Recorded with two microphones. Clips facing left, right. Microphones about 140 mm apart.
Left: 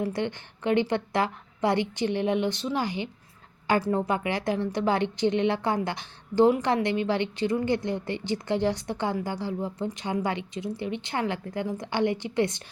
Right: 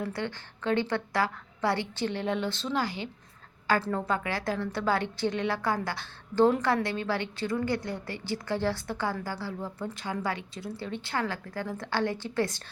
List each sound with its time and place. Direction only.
0.0 s a woman's voice: 20° left (ahead or behind)